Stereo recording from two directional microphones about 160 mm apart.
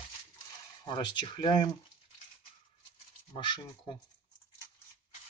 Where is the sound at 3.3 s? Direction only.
30° left (ahead or behind).